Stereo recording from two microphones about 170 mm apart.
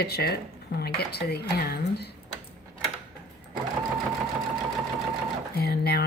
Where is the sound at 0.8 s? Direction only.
70° left (ahead or behind).